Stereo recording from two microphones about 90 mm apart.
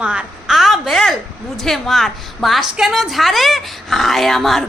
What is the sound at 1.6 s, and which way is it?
A woman's voice, 5° left (ahead or behind).